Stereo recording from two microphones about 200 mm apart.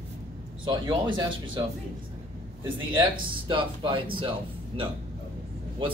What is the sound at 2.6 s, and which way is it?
Speech, 25° right (ahead or behind).